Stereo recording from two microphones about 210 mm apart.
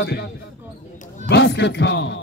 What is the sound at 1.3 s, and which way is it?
Speech, 55° left (ahead or behind).